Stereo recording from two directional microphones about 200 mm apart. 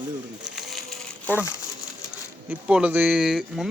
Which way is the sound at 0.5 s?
Centre (ahead or behind).